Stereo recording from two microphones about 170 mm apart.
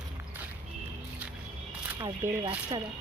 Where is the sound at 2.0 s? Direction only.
25° right (ahead or behind).